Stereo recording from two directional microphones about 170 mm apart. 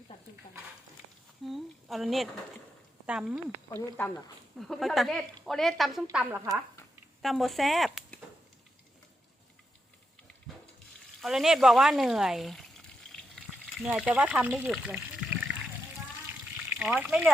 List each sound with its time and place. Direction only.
1.5 s a sound: centre (ahead or behind)
3.1 s a woman's voice: 5° right (ahead or behind)
3.7 s a woman's voice: 10° left (ahead or behind)
6.1 s speech: 15° right (ahead or behind)
7.2 s speech: centre (ahead or behind)
11.2 s speech: centre (ahead or behind)
16.7 s speech: 5° right (ahead or behind)